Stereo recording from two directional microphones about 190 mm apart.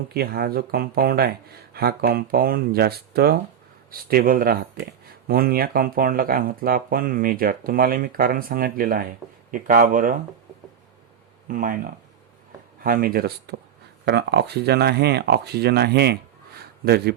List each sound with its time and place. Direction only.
0.1 s speech: 55° right (ahead or behind)
11.4 s speech: 45° right (ahead or behind)
12.8 s speech: 50° right (ahead or behind)